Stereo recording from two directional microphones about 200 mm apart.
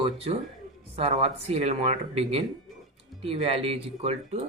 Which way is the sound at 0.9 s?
30° right (ahead or behind).